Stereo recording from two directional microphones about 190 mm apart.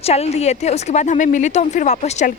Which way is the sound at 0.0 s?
35° left (ahead or behind).